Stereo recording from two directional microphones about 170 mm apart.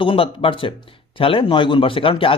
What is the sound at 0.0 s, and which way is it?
Speech, 30° left (ahead or behind).